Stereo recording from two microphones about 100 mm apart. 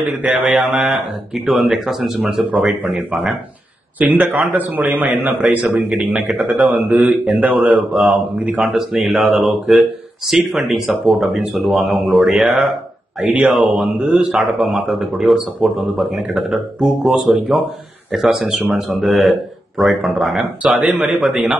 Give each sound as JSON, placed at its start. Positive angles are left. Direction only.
{"t": 0.0, "sound": "a man's voice", "side_deg": -15}
{"t": 0.6, "sound": "a man's voice", "side_deg": -5}
{"t": 8.4, "sound": "a man's voice", "side_deg": -10}
{"t": 9.0, "sound": "a man's voice", "side_deg": 0}
{"t": 20.7, "sound": "a man's voice", "side_deg": -15}
{"t": 21.2, "sound": "a man's voice", "side_deg": 0}